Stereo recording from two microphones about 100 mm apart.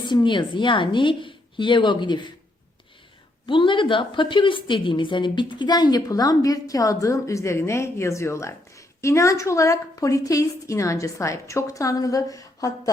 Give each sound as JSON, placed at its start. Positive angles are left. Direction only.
{"t": 0.0, "sound": "a woman's voice", "side_deg": 50}
{"t": 3.4, "sound": "a woman's voice", "side_deg": 55}